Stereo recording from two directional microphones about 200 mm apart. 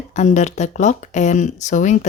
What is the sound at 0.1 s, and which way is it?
Speech, 35° left (ahead or behind).